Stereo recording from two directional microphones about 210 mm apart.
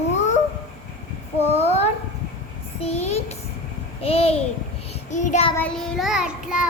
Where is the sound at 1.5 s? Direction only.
30° left (ahead or behind).